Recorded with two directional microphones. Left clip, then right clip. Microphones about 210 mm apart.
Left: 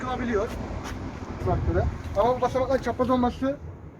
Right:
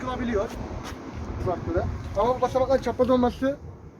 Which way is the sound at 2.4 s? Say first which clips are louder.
Right 2 dB; 45° right (ahead or behind).